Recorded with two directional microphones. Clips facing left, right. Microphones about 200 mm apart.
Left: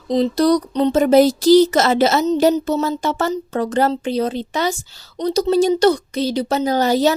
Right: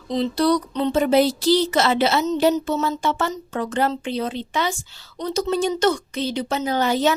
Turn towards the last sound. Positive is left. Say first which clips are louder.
# left 4 dB
turn(degrees=40)  # may be behind; listen again after turning